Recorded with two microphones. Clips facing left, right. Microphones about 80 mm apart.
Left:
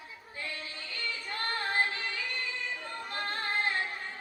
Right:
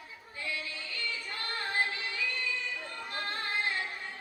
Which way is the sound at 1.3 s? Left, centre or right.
Left.